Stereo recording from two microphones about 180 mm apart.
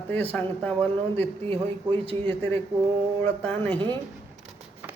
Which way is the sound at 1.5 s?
30° right (ahead or behind).